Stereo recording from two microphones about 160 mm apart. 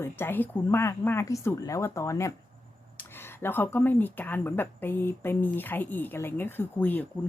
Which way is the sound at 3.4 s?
15° left (ahead or behind).